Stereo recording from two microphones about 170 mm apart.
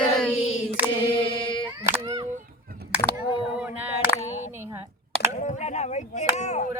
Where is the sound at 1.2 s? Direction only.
30° left (ahead or behind).